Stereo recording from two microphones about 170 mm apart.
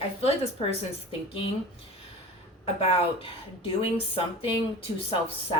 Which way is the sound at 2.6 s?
35° left (ahead or behind).